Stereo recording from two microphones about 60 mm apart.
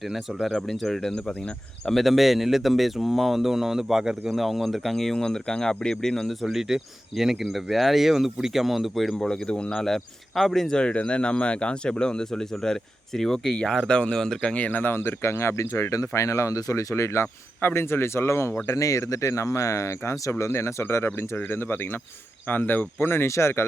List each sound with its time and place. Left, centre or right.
0.0 s speech: centre
4.4 s speech: centre
6.4 s speech: centre
9.1 s speech: centre
14.5 s speech: left
16.9 s speech: left
17.6 s speech: left
18.6 s speech: left